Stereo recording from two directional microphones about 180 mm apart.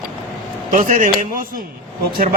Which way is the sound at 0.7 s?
45° right (ahead or behind).